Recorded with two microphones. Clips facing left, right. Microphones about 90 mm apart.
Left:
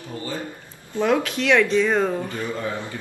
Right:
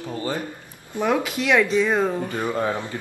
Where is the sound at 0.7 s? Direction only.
15° right (ahead or behind).